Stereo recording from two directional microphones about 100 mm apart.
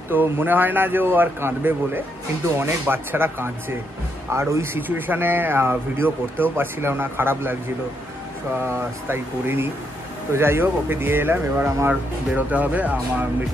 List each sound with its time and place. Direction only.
0.1 s speech: 20° right (ahead or behind)
8.5 s speech: 25° right (ahead or behind)